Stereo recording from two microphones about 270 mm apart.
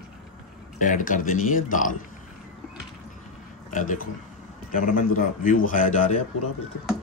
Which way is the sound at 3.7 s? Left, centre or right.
Left.